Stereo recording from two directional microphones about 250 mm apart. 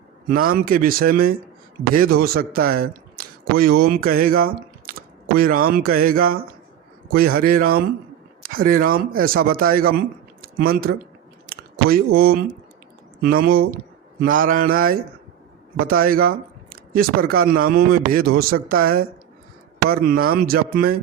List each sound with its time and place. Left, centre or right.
0.3 s speech: right
11.4 s a sound: right
13.2 s speech: right